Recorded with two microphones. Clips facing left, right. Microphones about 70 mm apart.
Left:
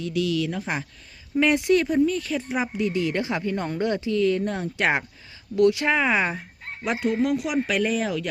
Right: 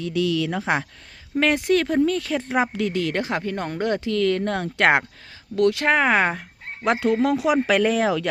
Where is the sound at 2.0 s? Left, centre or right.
Right.